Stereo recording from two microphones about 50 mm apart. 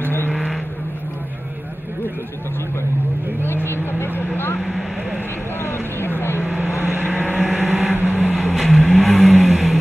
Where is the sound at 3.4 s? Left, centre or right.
Left.